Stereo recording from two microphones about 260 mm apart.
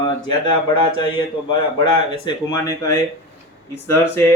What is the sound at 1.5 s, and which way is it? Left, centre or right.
Speech, centre.